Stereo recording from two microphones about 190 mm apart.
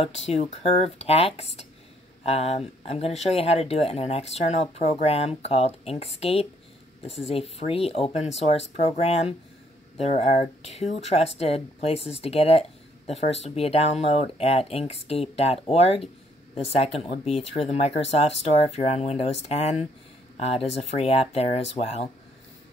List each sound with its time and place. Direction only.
0.3 s speech: 35° left (ahead or behind)